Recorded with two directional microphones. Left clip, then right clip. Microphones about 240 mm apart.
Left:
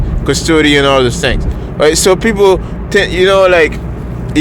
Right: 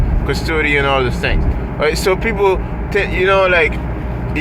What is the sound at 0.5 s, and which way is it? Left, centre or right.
Speech, left.